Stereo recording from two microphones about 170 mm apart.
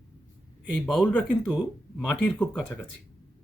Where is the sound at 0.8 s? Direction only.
5° left (ahead or behind).